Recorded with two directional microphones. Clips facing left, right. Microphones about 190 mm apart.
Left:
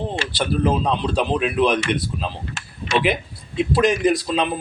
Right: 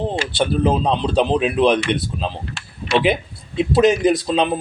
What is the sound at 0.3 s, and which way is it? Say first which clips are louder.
A man's voice: right 2 dB; 30° right (ahead or behind).